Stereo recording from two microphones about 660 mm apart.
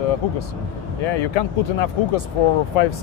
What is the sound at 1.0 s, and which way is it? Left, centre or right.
Speech, left.